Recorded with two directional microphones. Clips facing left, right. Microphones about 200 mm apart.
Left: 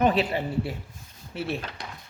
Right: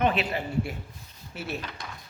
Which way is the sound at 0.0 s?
35° left (ahead or behind).